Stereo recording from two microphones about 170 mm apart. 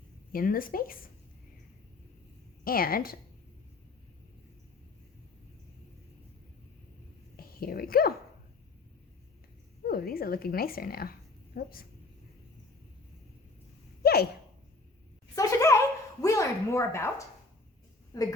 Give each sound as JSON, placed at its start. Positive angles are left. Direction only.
{"t": 0.3, "sound": "a woman's voice", "side_deg": 55}
{"t": 2.6, "sound": "a woman's voice", "side_deg": 60}
{"t": 7.3, "sound": "speech", "side_deg": 60}
{"t": 9.8, "sound": "a woman's voice", "side_deg": 60}
{"t": 14.0, "sound": "hiccup", "side_deg": 65}
{"t": 15.4, "sound": "a sound", "side_deg": 20}
{"t": 16.2, "sound": "a woman's voice", "side_deg": 20}